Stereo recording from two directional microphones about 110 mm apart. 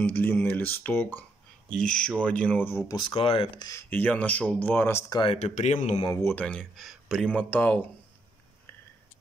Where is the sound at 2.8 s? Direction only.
45° left (ahead or behind).